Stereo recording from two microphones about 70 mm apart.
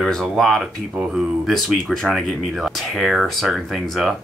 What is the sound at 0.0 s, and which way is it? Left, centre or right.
Speech, centre.